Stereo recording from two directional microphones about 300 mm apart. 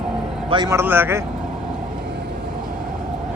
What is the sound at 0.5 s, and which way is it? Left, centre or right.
Speech, centre.